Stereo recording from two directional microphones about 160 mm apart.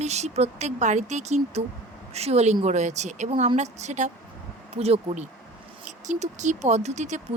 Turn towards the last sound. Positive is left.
turn(degrees=-45)  # may be behind; listen again after turning